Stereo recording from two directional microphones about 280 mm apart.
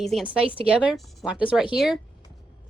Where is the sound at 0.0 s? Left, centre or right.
Centre.